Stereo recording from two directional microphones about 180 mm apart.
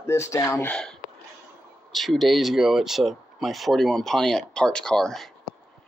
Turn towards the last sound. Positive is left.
turn(degrees=5)  # may be behind; listen again after turning